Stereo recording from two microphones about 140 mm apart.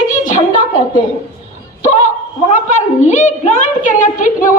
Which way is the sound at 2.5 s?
60° left (ahead or behind).